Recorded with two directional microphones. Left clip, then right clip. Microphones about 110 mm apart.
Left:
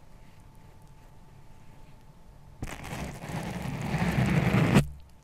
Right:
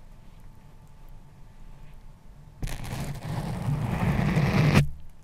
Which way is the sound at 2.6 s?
30° right (ahead or behind).